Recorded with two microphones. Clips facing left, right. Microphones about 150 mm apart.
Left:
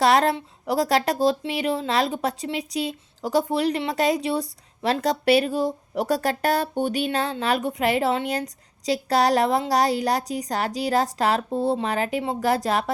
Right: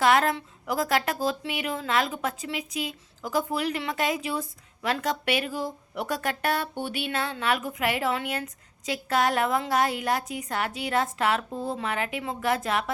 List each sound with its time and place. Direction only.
0.0 s a woman's voice: 35° left (ahead or behind)